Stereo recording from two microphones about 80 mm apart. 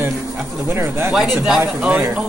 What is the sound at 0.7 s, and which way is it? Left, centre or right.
Speech, right.